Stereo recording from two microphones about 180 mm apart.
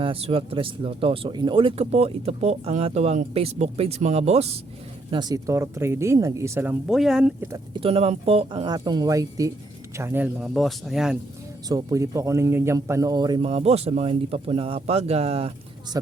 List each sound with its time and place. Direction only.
0.0 s speech: 30° right (ahead or behind)
5.1 s speech: 20° right (ahead or behind); by 7.3 s 5° right (ahead or behind)
7.4 s speech: 20° right (ahead or behind)
7.8 s speech: 35° right (ahead or behind); by 11.2 s 5° right (ahead or behind)
11.7 s speech: 15° right (ahead or behind)